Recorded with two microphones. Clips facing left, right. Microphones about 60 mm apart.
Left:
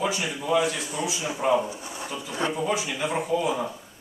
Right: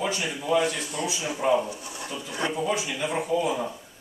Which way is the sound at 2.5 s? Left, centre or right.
Centre.